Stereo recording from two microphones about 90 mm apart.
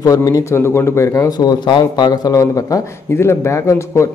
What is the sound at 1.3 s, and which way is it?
A man's voice, 55° left (ahead or behind).